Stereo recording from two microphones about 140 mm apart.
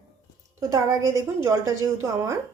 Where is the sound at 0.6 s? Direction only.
25° right (ahead or behind).